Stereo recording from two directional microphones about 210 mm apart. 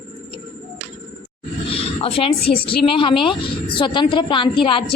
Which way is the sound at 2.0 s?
25° left (ahead or behind).